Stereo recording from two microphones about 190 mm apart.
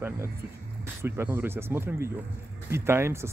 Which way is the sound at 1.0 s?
15° right (ahead or behind).